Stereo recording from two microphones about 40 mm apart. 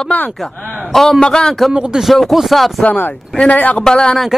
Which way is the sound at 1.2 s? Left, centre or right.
Centre.